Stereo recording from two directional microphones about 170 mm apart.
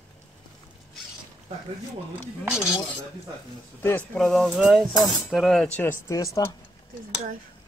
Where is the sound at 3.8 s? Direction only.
10° left (ahead or behind).